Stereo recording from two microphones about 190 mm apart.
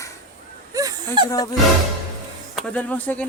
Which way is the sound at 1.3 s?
20° left (ahead or behind).